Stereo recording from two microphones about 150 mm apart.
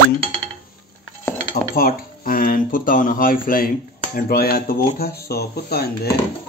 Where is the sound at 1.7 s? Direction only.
75° left (ahead or behind).